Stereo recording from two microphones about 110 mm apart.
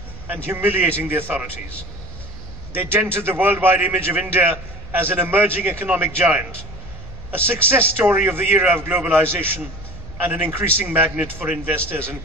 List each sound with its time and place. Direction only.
0.3 s a man's voice: 20° right (ahead or behind)
2.7 s a man's voice: 20° right (ahead or behind)